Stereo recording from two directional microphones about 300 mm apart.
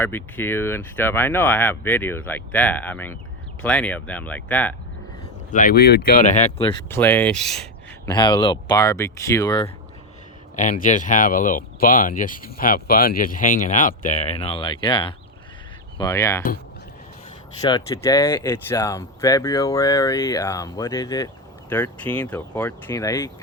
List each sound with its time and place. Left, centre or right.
0.0 s speech: centre
5.5 s speech: left
6.9 s speech: centre
8.1 s speech: centre
10.6 s speech: left; by 16.4 s centre
17.6 s speech: centre